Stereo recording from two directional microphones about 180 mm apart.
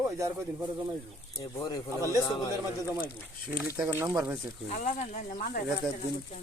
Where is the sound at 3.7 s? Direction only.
10° right (ahead or behind).